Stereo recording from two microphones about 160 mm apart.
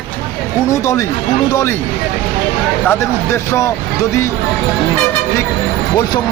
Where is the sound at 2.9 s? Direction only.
15° left (ahead or behind).